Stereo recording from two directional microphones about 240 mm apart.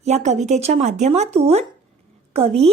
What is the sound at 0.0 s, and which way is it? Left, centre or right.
A woman's voice, right.